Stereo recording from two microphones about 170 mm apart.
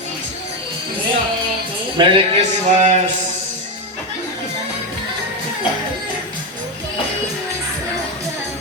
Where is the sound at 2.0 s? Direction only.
35° right (ahead or behind).